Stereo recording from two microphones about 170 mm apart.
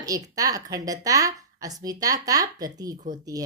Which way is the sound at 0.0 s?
20° right (ahead or behind).